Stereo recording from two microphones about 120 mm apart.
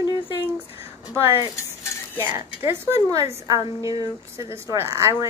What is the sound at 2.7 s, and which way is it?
A woman's voice, 20° right (ahead or behind).